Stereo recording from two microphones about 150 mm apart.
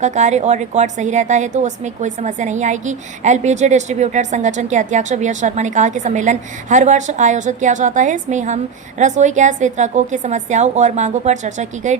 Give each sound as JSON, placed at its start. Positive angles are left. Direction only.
{"t": 0.0, "sound": "a woman's voice", "side_deg": -50}